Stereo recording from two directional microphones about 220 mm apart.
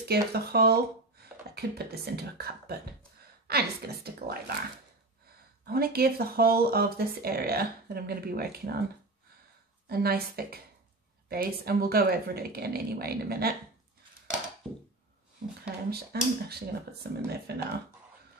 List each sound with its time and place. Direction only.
0.0 s speech: 45° right (ahead or behind)
5.7 s speech: 45° right (ahead or behind)
9.8 s speech: 45° right (ahead or behind)
15.6 s speech: 45° right (ahead or behind)